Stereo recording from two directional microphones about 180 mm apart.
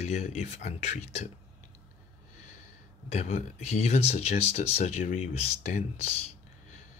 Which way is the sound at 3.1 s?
40° left (ahead or behind).